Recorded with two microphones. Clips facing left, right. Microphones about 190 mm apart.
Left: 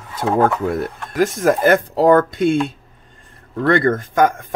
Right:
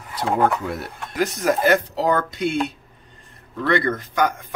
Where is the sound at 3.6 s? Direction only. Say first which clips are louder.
Left 5 dB; 50° left (ahead or behind).